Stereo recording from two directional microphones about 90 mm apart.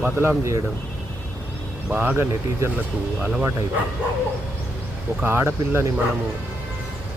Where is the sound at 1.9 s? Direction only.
20° right (ahead or behind).